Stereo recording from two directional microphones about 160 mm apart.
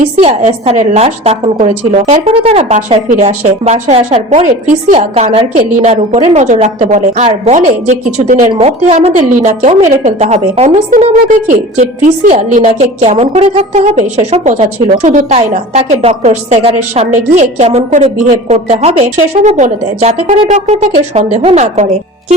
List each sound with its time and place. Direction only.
0.2 s a woman's voice: 40° right (ahead or behind)
8.6 s a woman's voice: 40° right (ahead or behind)